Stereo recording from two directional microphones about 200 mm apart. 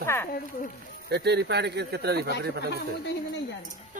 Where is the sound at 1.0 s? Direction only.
55° right (ahead or behind).